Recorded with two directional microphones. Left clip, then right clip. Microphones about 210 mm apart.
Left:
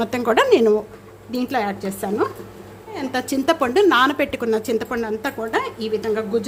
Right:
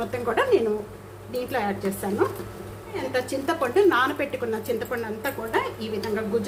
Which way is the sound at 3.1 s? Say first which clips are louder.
Left 6 dB; 50° left (ahead or behind).